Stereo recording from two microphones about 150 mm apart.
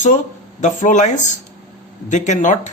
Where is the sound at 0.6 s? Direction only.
55° left (ahead or behind).